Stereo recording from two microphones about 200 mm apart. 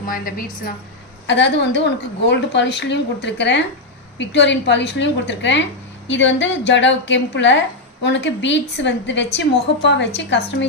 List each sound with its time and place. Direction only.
0.1 s a woman's voice: 45° left (ahead or behind)
1.3 s a woman's voice: 60° left (ahead or behind)